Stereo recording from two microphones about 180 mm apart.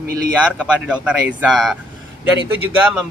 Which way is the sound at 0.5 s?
5° right (ahead or behind).